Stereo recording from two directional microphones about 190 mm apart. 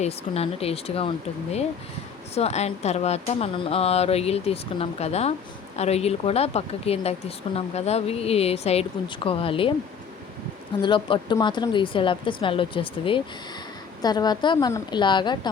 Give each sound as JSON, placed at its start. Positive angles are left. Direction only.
{"t": 0.0, "sound": "speech", "side_deg": 30}
{"t": 2.3, "sound": "speech", "side_deg": 35}
{"t": 10.8, "sound": "speech", "side_deg": 25}